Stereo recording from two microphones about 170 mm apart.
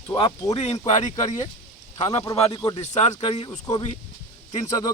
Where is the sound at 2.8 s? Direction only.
40° left (ahead or behind).